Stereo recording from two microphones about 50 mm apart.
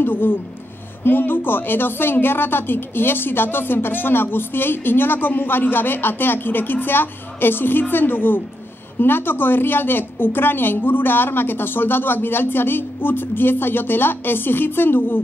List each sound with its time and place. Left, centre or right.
0.0 s a woman's voice: left